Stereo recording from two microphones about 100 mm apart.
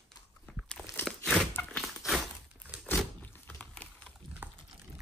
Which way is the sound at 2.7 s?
15° left (ahead or behind).